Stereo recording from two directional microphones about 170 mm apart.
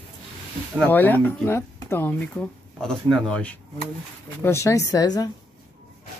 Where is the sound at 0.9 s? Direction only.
10° left (ahead or behind).